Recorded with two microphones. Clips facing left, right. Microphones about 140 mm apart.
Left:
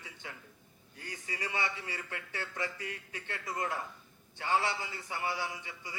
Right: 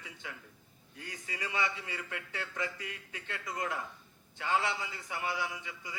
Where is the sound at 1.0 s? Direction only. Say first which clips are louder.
Left 1 dB; 30° left (ahead or behind).